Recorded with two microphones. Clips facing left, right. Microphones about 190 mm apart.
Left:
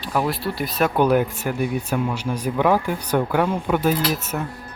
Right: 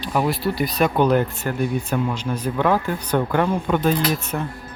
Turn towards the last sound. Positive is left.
turn(degrees=5)  # may be behind; listen again after turning